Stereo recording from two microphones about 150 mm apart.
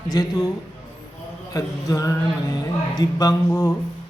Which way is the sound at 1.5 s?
20° left (ahead or behind).